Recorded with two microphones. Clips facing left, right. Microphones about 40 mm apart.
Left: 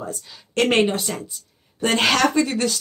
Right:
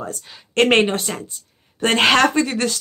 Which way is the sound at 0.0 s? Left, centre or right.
Right.